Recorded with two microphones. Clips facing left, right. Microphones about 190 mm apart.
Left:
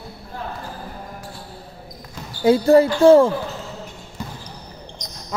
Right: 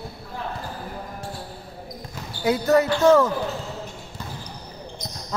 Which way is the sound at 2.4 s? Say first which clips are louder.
Left 6 dB; 30° left (ahead or behind).